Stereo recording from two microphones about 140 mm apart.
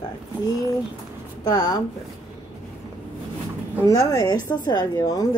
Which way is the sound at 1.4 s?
30° left (ahead or behind).